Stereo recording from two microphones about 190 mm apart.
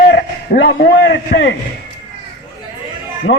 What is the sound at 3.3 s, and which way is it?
Speech, 65° left (ahead or behind).